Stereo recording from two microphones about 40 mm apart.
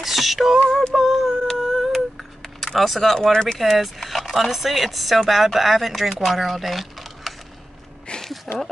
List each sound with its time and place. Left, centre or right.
0.0 s music: centre
0.9 s a sound: centre
2.6 s speech: centre
3.2 s speech: centre
3.5 s speech: centre
8.1 s a sound: left
8.5 s speech: centre